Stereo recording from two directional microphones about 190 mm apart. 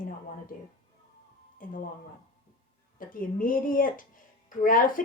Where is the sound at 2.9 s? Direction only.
45° left (ahead or behind).